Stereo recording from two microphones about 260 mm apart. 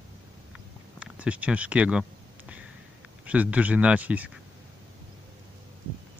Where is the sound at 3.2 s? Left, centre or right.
Centre.